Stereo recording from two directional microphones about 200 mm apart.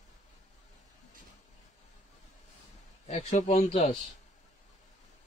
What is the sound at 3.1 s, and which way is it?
Speech, 30° left (ahead or behind).